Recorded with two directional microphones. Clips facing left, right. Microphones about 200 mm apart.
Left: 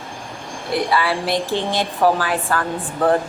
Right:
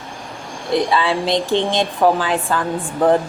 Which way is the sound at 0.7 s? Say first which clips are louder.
Right 2 dB; 20° right (ahead or behind).